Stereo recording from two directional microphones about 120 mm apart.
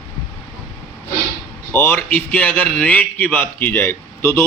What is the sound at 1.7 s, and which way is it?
A man's voice, 15° left (ahead or behind).